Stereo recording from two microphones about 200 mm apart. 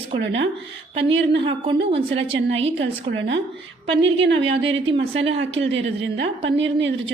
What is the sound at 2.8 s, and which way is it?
Speech, 65° right (ahead or behind).